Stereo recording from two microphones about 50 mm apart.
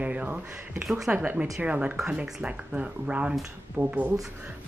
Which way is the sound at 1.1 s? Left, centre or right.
Right.